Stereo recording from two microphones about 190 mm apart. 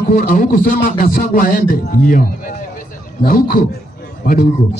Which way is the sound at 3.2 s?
50° left (ahead or behind).